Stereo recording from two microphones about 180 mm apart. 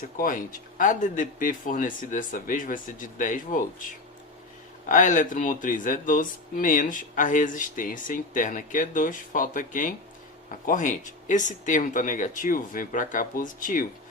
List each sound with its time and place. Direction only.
0.2 s speech: 45° left (ahead or behind)
4.9 s speech: 45° left (ahead or behind)